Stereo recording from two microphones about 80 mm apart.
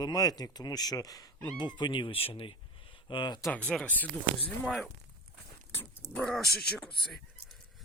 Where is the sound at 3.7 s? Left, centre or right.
Centre.